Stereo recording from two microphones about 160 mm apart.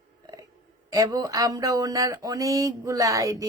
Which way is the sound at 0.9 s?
20° right (ahead or behind).